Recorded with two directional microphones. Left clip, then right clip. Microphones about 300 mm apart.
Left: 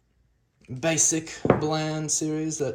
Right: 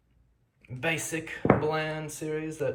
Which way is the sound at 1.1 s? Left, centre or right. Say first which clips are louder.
Left 2 dB; centre.